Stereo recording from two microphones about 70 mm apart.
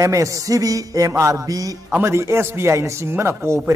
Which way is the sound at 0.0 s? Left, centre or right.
Right.